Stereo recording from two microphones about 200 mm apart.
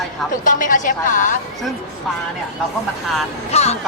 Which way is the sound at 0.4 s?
40° left (ahead or behind).